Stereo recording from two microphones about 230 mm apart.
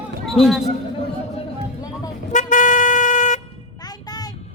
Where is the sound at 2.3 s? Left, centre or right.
Left.